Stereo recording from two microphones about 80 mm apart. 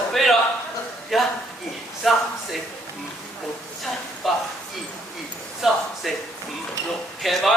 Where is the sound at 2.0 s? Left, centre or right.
Centre.